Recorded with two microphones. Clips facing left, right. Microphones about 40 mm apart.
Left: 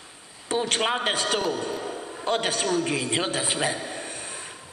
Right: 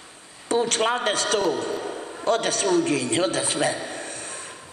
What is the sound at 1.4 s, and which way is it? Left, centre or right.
Speech, centre.